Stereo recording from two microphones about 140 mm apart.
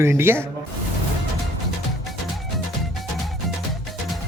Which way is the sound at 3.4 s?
Centre (ahead or behind).